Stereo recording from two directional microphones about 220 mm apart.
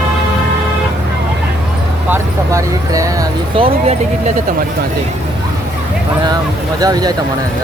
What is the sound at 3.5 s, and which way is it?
Speech, 25° right (ahead or behind).